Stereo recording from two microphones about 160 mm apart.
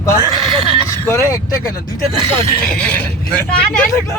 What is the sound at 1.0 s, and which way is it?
Speech, 20° left (ahead or behind).